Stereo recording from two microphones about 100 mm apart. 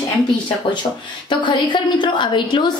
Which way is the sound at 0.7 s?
50° left (ahead or behind).